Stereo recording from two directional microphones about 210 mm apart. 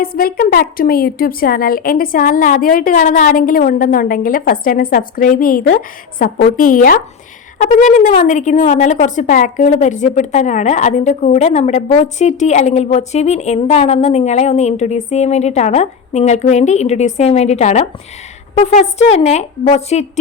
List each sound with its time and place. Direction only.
0.0 s a woman's voice: 45° left (ahead or behind)